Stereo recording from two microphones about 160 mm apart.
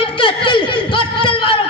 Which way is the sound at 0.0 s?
30° left (ahead or behind).